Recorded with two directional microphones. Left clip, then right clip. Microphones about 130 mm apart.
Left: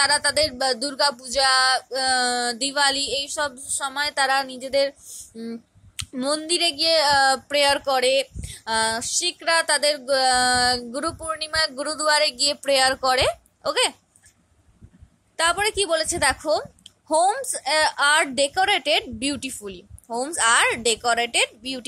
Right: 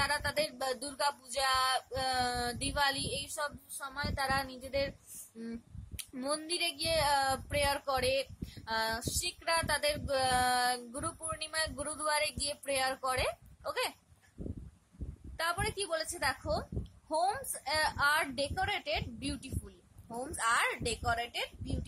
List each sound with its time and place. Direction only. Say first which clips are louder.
0.0 s speech: left 12 dB; 35° left (ahead or behind)
6.2 s speech: left 12 dB; 30° left (ahead or behind)
15.3 s speech: left 13 dB; 40° left (ahead or behind)